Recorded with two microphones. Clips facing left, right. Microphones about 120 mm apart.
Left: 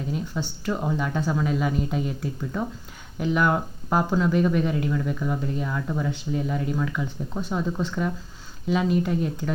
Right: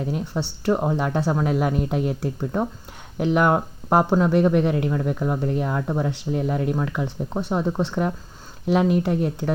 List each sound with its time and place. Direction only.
0.0 s speech: 65° right (ahead or behind)
2.4 s speech: 40° right (ahead or behind)
3.2 s speech: 65° right (ahead or behind)
5.0 s speech: 55° right (ahead or behind)